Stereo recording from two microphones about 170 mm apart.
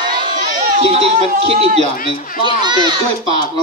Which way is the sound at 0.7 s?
35° right (ahead or behind).